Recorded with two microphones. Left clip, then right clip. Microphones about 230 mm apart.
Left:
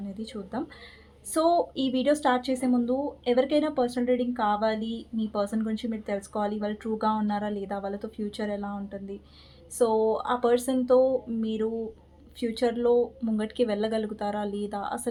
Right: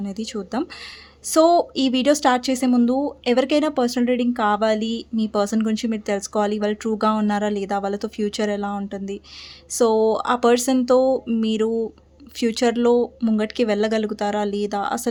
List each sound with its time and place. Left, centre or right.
0.0 s speech: right